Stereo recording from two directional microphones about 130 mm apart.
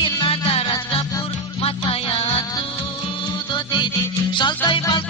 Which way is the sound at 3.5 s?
35° left (ahead or behind).